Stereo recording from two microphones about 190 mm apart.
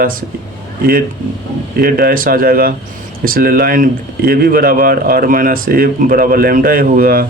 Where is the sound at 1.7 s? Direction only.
50° right (ahead or behind).